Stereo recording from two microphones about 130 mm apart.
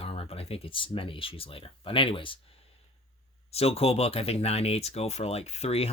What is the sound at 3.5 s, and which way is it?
Speech, 50° left (ahead or behind).